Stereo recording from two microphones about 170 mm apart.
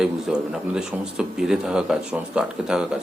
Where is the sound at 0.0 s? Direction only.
5° right (ahead or behind).